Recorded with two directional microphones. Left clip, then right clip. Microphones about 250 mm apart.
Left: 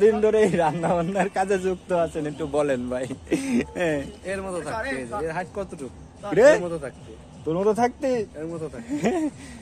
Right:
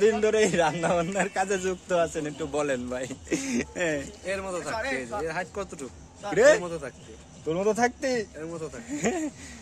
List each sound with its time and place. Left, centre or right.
0.2 s a man's voice: centre
4.3 s speech: centre
4.7 s speech: right
5.2 s speech: centre
6.3 s speech: centre
6.6 s speech: centre
7.4 s a man's voice: centre